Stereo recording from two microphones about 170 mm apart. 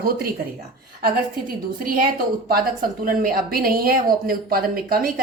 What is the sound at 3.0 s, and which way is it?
A woman's voice, 60° right (ahead or behind).